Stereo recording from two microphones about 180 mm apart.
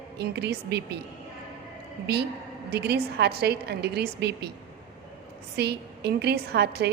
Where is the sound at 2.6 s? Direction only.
65° right (ahead or behind).